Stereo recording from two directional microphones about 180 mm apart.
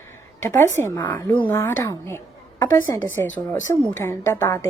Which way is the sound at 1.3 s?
10° left (ahead or behind).